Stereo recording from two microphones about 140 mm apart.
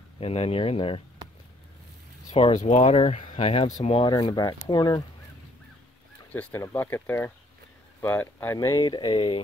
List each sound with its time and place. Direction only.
0.2 s speech: 45° left (ahead or behind)
2.3 s speech: 45° left (ahead or behind)
4.1 s speech: 30° left (ahead or behind)
6.3 s speech: 15° left (ahead or behind)
8.5 s speech: 30° left (ahead or behind)